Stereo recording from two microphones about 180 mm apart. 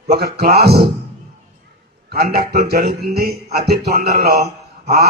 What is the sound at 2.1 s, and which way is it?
A man's voice, 60° right (ahead or behind).